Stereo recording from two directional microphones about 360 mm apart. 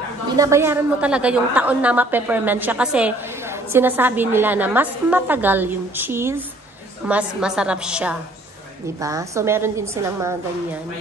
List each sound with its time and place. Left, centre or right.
0.4 s a woman's voice: centre